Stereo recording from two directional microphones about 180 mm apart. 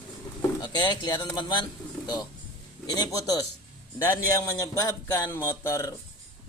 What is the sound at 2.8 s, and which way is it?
A man's voice, 20° left (ahead or behind).